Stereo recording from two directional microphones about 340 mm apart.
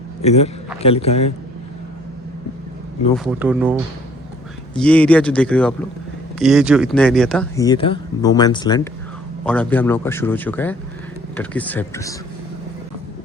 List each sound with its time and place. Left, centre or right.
0.2 s a man's voice: centre
3.2 s a man's voice: centre